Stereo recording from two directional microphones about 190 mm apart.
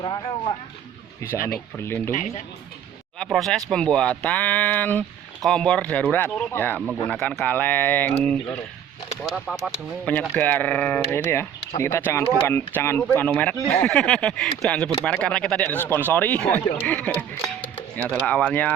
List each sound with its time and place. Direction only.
1.4 s speech: 50° left (ahead or behind)
1.8 s speech: 15° left (ahead or behind)
2.1 s speech: 35° left (ahead or behind)
3.2 s speech: centre (ahead or behind)
17.4 s music: 10° left (ahead or behind)
18.3 s speech: 10° left (ahead or behind)